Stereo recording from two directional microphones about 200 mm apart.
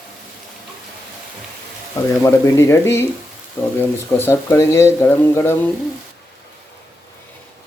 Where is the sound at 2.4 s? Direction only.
15° left (ahead or behind).